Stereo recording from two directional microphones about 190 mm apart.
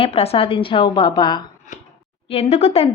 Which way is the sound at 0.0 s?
30° left (ahead or behind).